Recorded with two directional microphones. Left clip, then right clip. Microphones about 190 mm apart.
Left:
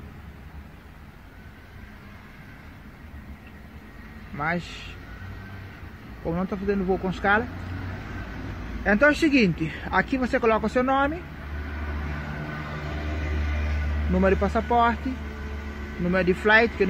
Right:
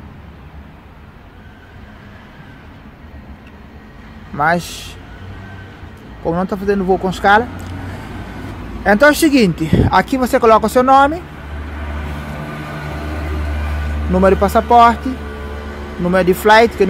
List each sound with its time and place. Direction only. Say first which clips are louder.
4.4 s speech: right 13 dB; 15° right (ahead or behind)
6.2 s speech: right 10 dB; 5° right (ahead or behind)
8.8 s speech: right 10 dB; 10° right (ahead or behind)
14.2 s speech: right 11 dB; 10° right (ahead or behind)
16.1 s speech: right 10 dB; 10° right (ahead or behind)